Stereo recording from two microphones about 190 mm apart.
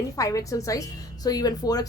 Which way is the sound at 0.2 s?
20° left (ahead or behind).